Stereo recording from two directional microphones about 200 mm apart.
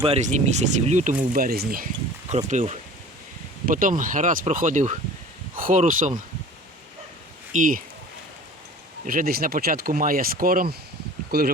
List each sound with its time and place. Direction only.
0.0 s speech: 35° right (ahead or behind)
2.3 s speech: 35° right (ahead or behind)
7.5 s speech: 40° right (ahead or behind)
9.0 s speech: 45° right (ahead or behind)